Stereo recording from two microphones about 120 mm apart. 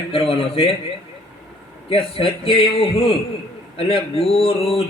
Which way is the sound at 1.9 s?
50° left (ahead or behind).